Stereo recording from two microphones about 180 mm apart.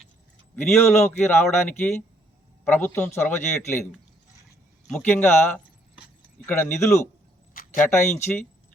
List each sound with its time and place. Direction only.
0.5 s speech: 10° left (ahead or behind)
4.9 s speech: 10° left (ahead or behind)
7.5 s a sound: 50° left (ahead or behind)
7.9 s speech: 15° left (ahead or behind)